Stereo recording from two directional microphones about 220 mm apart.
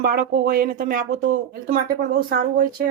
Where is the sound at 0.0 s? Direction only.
40° right (ahead or behind).